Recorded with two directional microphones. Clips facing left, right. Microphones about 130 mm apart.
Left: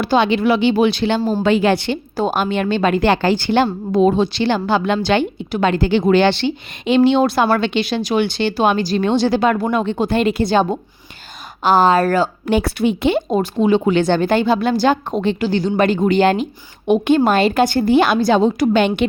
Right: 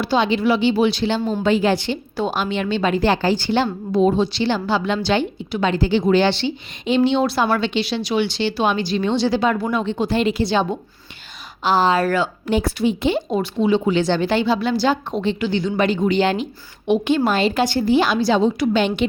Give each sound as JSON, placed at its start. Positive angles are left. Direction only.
{"t": 0.0, "sound": "a woman's voice", "side_deg": 60}
{"t": 1.4, "sound": "a woman's voice", "side_deg": 70}
{"t": 2.1, "sound": "a woman's voice", "side_deg": 45}
{"t": 12.5, "sound": "a woman's voice", "side_deg": 65}
{"t": 13.3, "sound": "a woman's voice", "side_deg": 45}